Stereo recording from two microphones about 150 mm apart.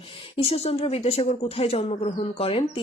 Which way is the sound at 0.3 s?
40° left (ahead or behind).